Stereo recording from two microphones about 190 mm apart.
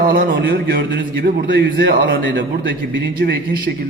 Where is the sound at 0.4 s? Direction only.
55° right (ahead or behind).